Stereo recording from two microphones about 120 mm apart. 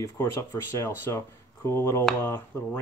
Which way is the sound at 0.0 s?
25° left (ahead or behind).